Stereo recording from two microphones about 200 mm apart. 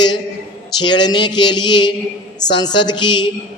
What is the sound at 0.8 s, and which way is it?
Speech, 20° left (ahead or behind).